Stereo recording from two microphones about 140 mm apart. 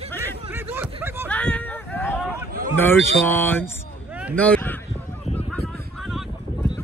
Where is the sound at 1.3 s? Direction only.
10° left (ahead or behind).